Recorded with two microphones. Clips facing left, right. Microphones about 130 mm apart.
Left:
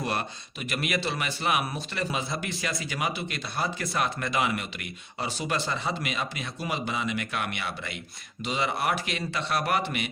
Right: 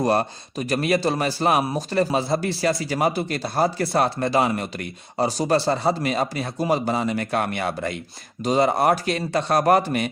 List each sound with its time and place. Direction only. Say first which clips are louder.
0.0 s speech: right 10 dB; 40° right (ahead or behind)